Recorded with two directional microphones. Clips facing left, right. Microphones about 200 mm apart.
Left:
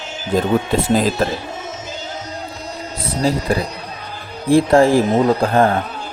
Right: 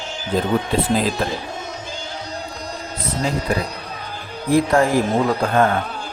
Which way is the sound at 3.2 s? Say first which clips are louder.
Left 6 dB; 35° left (ahead or behind).